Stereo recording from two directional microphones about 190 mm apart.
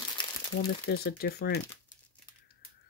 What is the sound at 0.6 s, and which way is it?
Speech, 55° left (ahead or behind).